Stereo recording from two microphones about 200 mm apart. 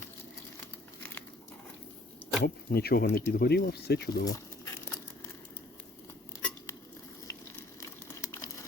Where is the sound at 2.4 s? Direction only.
50° left (ahead or behind).